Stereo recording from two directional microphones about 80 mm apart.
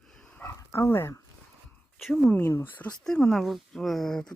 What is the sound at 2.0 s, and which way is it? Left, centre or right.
Speech, centre.